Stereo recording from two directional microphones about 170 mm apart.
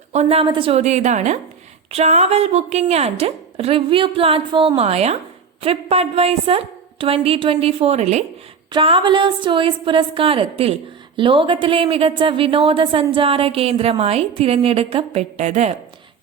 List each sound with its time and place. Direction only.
0.1 s a woman's voice: 40° right (ahead or behind)
8.7 s a woman's voice: 30° right (ahead or behind)